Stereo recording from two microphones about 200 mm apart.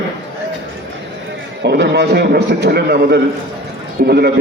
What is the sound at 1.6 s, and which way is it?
A man's voice, 55° right (ahead or behind).